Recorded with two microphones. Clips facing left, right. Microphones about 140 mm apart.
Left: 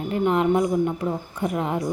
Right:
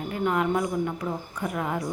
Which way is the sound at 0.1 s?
25° left (ahead or behind).